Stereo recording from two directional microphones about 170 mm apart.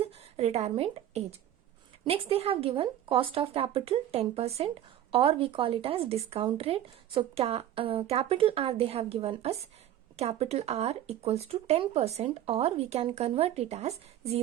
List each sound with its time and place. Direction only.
0.0 s a woman's voice: 35° right (ahead or behind)